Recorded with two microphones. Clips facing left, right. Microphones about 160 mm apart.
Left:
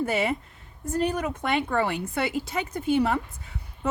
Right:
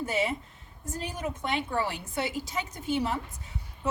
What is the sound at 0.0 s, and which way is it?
Speech, 65° left (ahead or behind).